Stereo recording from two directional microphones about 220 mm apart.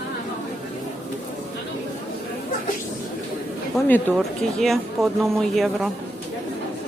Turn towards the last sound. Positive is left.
turn(degrees=0)  # may be behind; listen again after turning